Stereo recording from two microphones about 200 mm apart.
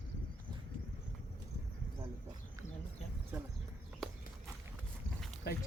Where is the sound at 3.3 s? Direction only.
5° right (ahead or behind).